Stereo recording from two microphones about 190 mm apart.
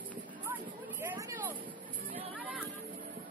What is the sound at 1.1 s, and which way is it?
Vehicle, 10° right (ahead or behind).